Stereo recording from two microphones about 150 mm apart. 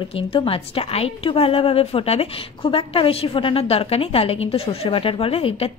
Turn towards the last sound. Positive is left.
turn(degrees=40)  # may be behind; listen again after turning